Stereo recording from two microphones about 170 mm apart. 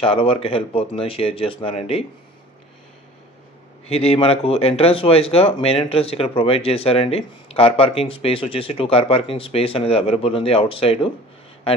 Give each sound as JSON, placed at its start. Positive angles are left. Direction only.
{"t": 0.0, "sound": "speech", "side_deg": 35}
{"t": 3.8, "sound": "speech", "side_deg": 35}